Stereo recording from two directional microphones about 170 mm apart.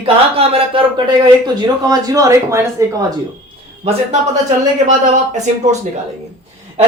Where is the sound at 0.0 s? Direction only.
35° right (ahead or behind); by 2.9 s 15° right (ahead or behind).